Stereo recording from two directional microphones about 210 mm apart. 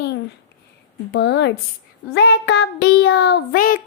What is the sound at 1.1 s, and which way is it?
Child singing, 55° left (ahead or behind).